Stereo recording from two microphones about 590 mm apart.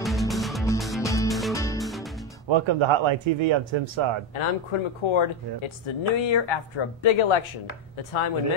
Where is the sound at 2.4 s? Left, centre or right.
Right.